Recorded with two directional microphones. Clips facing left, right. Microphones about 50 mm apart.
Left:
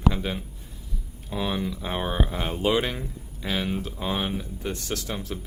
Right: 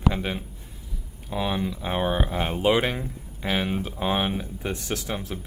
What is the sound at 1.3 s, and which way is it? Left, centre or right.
Speech, centre.